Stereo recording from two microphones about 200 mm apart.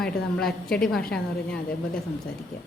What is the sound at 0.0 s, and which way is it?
A woman's voice, 5° left (ahead or behind).